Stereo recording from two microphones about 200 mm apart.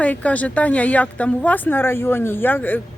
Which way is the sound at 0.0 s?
5° left (ahead or behind).